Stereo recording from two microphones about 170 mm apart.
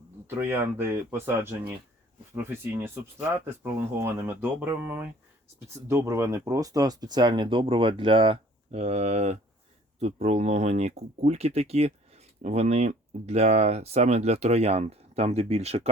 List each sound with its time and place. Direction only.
0.3 s speech: 15° right (ahead or behind); by 15.9 s 40° right (ahead or behind)